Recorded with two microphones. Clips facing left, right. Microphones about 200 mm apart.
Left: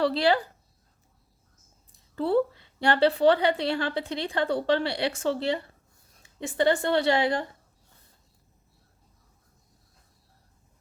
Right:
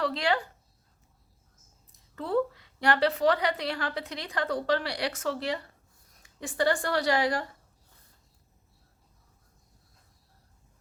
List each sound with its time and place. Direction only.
0.0 s speech: 35° left (ahead or behind)
1.9 s a woman's voice: 30° left (ahead or behind)